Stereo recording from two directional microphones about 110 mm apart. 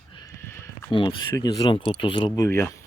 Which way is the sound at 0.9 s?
50° left (ahead or behind).